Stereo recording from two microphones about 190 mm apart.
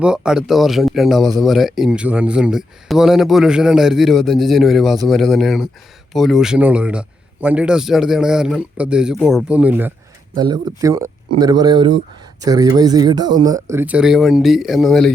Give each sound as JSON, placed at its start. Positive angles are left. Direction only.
{"t": 0.0, "sound": "a man's voice", "side_deg": -5}
{"t": 10.3, "sound": "speech", "side_deg": -20}